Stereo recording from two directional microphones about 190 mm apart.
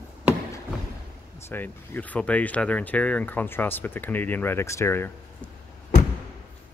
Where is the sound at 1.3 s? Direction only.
10° left (ahead or behind).